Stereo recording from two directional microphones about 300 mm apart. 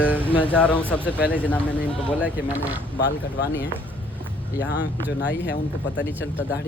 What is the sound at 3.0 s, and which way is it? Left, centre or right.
Speech, left.